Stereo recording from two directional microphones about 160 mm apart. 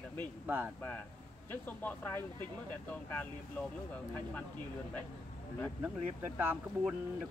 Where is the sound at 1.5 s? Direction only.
10° left (ahead or behind).